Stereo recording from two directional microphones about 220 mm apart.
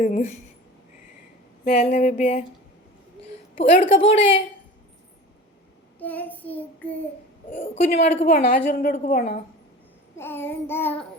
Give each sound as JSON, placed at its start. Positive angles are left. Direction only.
{"t": 0.0, "sound": "a woman's voice", "side_deg": 35}
{"t": 1.6, "sound": "a woman's voice", "side_deg": 35}
{"t": 3.6, "sound": "a woman's voice", "side_deg": 25}
{"t": 6.0, "sound": "child singing", "side_deg": 10}
{"t": 7.5, "sound": "a woman's voice", "side_deg": 30}
{"t": 10.2, "sound": "child singing", "side_deg": 10}